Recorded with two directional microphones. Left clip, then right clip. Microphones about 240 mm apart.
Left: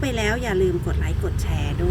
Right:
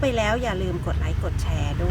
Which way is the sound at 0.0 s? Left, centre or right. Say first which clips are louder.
Right 2 dB; centre.